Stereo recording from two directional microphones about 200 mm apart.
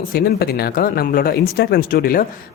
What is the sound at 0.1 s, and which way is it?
Speech, 50° left (ahead or behind).